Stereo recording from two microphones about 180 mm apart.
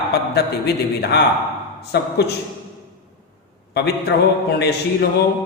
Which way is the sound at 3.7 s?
65° left (ahead or behind).